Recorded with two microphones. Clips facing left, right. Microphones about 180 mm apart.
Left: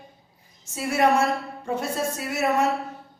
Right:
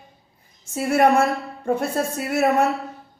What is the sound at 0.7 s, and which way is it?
A woman's voice, 55° right (ahead or behind).